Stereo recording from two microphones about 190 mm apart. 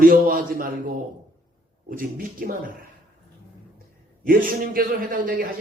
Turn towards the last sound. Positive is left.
turn(degrees=-45)  # may be behind; listen again after turning